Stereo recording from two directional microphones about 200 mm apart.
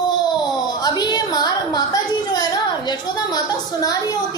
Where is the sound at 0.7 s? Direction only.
20° left (ahead or behind).